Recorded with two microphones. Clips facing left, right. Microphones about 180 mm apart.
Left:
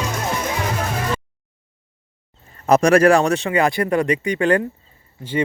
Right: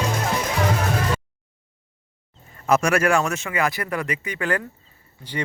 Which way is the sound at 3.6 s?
20° left (ahead or behind).